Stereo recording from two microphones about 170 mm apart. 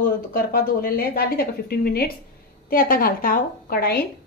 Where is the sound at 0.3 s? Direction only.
60° left (ahead or behind).